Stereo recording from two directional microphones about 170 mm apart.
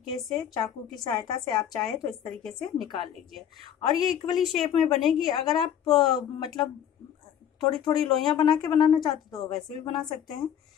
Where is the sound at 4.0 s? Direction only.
25° left (ahead or behind).